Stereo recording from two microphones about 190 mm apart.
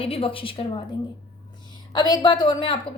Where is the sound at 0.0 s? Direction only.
30° left (ahead or behind).